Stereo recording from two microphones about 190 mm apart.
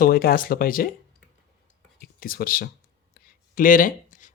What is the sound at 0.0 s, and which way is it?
Speech, 50° left (ahead or behind).